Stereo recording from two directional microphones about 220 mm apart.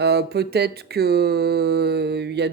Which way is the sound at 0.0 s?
50° right (ahead or behind).